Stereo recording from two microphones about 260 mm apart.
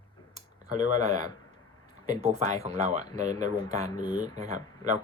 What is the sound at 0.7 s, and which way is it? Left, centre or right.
Speech, right.